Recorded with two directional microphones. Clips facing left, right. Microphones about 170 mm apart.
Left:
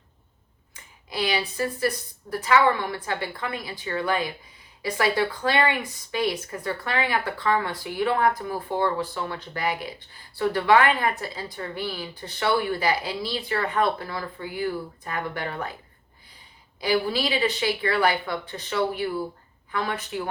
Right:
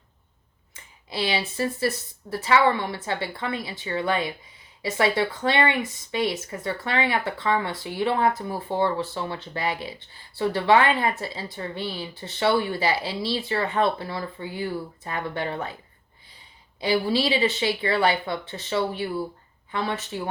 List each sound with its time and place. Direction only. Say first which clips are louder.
0.7 s a sound: right 1 dB; 25° right (ahead or behind)
2.3 s speech: even; 25° right (ahead or behind)
16.8 s speech: right 1 dB; 25° right (ahead or behind)